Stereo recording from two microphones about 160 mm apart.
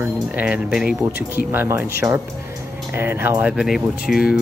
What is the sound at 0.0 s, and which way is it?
Speech, 10° right (ahead or behind).